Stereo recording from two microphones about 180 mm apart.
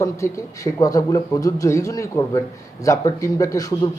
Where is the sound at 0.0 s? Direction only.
15° left (ahead or behind).